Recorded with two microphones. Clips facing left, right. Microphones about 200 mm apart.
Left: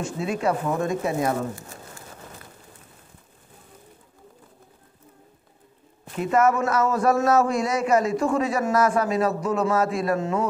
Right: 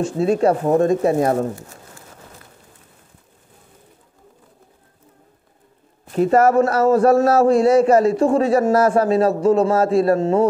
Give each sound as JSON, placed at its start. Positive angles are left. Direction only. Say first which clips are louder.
{"t": 0.0, "sound": "a man's voice", "louder": "right 8 dB", "side_deg": -35}
{"t": 6.1, "sound": "a man's voice", "louder": "right 7 dB", "side_deg": -35}